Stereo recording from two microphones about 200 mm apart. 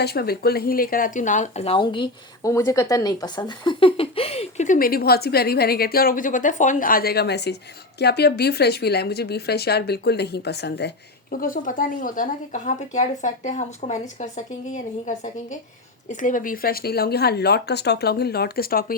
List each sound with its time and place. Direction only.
0.0 s speech: 50° left (ahead or behind)